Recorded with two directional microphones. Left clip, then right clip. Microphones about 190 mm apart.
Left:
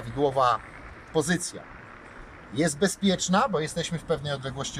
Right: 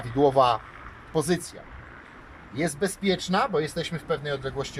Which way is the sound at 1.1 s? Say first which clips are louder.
Even; 10° right (ahead or behind).